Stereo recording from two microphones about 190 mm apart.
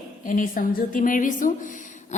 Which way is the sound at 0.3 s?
45° left (ahead or behind).